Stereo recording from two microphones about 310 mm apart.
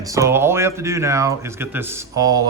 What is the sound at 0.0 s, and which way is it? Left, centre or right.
Speech, centre.